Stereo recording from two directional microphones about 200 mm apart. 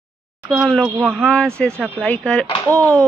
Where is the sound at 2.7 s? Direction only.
15° right (ahead or behind).